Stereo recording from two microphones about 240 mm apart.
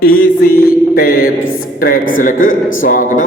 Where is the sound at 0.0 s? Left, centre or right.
Left.